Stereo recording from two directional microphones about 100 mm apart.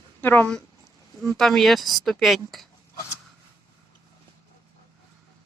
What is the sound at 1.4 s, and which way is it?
Speech, 5° left (ahead or behind).